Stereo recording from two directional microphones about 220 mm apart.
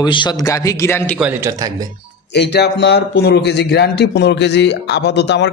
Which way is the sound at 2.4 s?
50° left (ahead or behind).